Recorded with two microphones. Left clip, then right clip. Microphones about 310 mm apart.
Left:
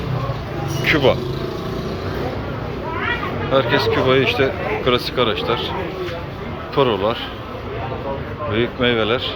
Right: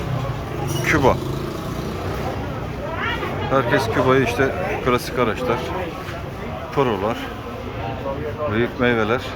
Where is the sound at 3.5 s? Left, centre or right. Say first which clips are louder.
Left 2 dB; centre.